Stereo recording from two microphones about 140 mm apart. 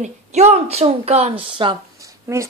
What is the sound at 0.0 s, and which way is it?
A woman's voice, 55° right (ahead or behind).